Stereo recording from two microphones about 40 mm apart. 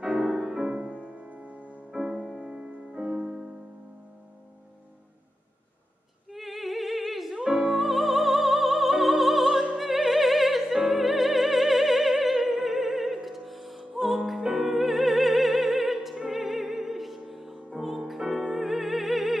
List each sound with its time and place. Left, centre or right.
0.0 s music: centre
0.7 s music: right
1.9 s music: centre
6.3 s opera: centre
7.3 s music: centre
7.7 s music: centre